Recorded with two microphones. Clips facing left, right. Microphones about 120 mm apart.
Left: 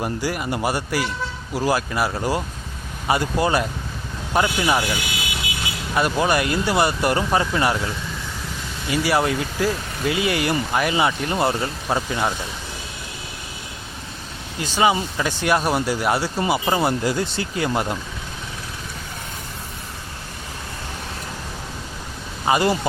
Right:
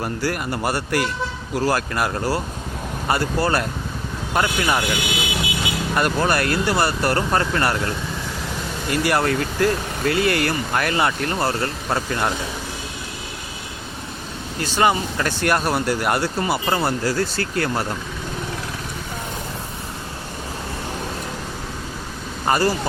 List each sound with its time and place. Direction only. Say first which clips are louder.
0.0 s speech: even; 5° left (ahead or behind)
5.1 s music: right 5 dB; 20° right (ahead or behind)
5.9 s speech: left 1 dB; 5° left (ahead or behind)
14.6 s speech: even; 5° left (ahead or behind)
22.4 s speech: even; 15° left (ahead or behind)